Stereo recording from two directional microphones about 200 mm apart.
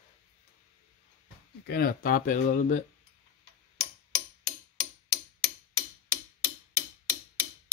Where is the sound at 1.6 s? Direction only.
50° left (ahead or behind).